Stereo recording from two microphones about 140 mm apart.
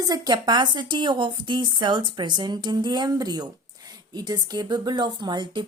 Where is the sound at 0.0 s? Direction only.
30° right (ahead or behind).